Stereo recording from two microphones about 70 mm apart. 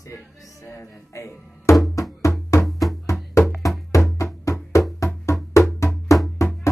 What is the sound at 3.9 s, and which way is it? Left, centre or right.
Music, left.